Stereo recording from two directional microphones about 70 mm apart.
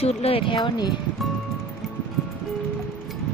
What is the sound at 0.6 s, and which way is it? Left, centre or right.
Speech, left.